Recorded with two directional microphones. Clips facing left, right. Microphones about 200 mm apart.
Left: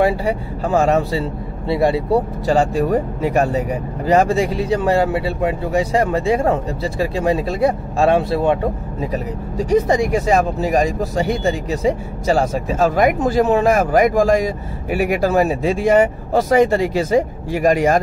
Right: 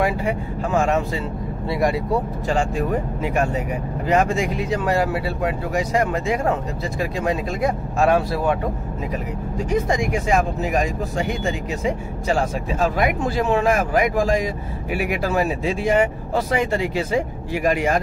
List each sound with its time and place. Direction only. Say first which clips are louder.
0.0 s speech: left 4 dB; 35° left (ahead or behind)